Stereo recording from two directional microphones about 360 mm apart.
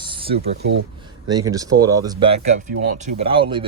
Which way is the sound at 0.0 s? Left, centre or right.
Centre.